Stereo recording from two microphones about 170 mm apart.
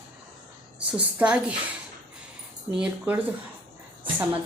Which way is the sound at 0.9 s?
5° right (ahead or behind).